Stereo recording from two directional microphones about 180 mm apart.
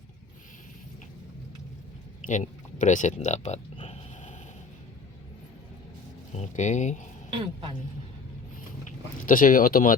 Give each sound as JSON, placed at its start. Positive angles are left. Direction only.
{"t": 2.2, "sound": "speech", "side_deg": 45}
{"t": 6.3, "sound": "speech", "side_deg": 40}
{"t": 7.3, "sound": "speech", "side_deg": -25}
{"t": 8.8, "sound": "speech", "side_deg": 50}